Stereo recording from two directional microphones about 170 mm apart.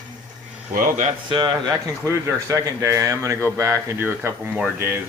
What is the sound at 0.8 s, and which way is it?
Speech, 50° right (ahead or behind).